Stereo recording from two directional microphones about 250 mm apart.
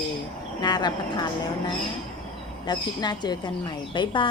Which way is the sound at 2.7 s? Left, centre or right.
Centre.